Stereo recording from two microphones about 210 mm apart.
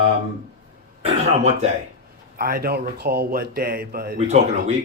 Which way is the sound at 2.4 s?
45° right (ahead or behind).